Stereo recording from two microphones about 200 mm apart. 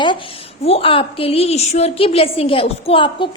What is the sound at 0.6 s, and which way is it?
A woman's voice, 30° left (ahead or behind).